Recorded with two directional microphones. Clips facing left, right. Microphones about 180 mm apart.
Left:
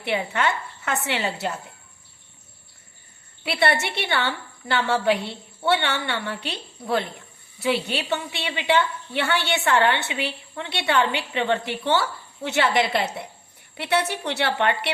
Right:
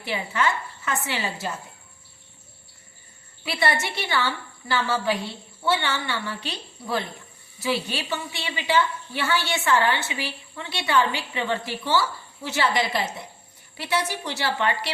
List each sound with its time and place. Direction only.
0.0 s a woman's voice: 65° left (ahead or behind)
3.4 s a woman's voice: 65° left (ahead or behind)